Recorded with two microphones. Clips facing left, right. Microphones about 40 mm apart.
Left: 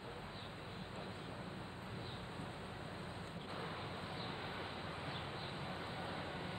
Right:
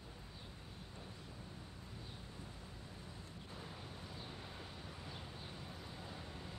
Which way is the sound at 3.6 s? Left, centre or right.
Left.